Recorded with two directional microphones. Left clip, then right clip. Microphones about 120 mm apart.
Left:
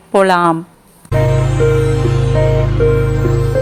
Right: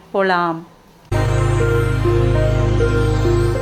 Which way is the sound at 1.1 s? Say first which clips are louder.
Left 4 dB; centre (ahead or behind).